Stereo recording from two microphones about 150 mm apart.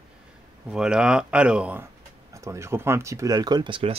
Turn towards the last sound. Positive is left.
turn(degrees=-35)  # may be behind; listen again after turning